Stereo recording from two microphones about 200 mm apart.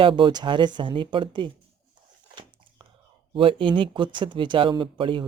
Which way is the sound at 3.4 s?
25° right (ahead or behind).